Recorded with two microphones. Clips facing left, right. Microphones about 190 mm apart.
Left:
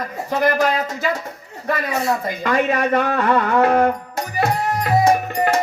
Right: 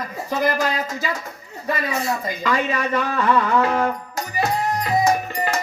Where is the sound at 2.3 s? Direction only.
55° left (ahead or behind).